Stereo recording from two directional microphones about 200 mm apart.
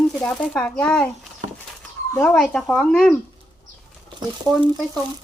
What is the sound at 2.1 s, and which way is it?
Speech, 5° left (ahead or behind).